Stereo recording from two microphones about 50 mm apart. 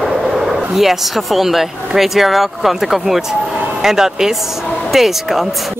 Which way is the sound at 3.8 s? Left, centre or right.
Centre.